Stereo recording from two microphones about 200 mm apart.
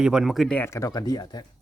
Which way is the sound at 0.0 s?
5° right (ahead or behind).